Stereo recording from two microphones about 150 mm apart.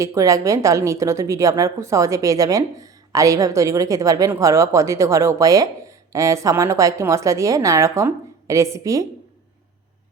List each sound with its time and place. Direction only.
0.0 s a woman's voice: 20° right (ahead or behind)